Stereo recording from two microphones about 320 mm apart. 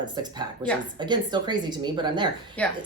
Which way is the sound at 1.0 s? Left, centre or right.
Centre.